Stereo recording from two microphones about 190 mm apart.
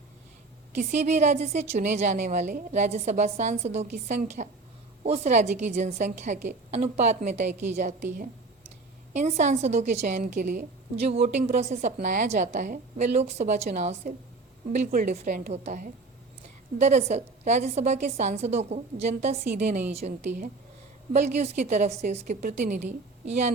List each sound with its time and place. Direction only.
0.7 s a woman's voice: 40° right (ahead or behind)
9.1 s a woman's voice: 40° right (ahead or behind)